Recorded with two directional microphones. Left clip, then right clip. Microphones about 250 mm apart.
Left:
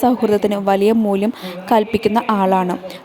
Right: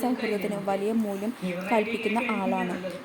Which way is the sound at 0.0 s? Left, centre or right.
Left.